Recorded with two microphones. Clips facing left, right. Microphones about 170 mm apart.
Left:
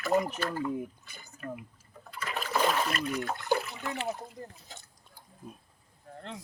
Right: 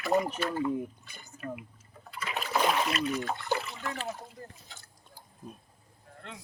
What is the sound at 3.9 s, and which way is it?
Speech, 20° left (ahead or behind).